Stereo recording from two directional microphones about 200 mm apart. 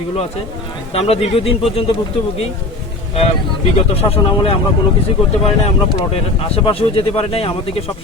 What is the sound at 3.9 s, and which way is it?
Speech, 30° left (ahead or behind).